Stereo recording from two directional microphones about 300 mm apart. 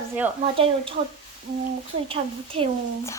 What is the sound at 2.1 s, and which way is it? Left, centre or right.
Speech, centre.